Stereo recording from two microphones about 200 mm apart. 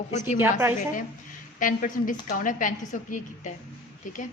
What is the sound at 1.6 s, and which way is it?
A woman's voice, 40° left (ahead or behind).